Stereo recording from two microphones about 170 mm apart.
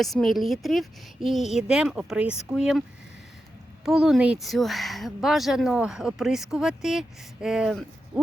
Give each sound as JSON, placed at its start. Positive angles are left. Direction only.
{"t": 0.0, "sound": "speech", "side_deg": 0}
{"t": 3.8, "sound": "speech", "side_deg": 0}